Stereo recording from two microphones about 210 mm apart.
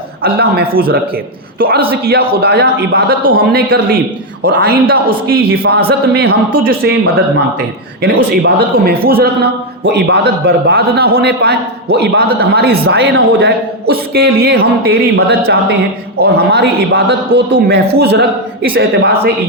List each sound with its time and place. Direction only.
0.2 s a man's voice: 50° right (ahead or behind)
8.3 s a man's voice: 50° right (ahead or behind)